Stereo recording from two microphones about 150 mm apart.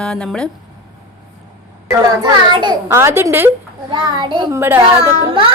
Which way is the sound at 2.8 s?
15° right (ahead or behind).